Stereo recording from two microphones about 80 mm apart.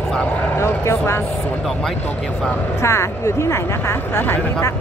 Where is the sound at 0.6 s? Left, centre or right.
Left.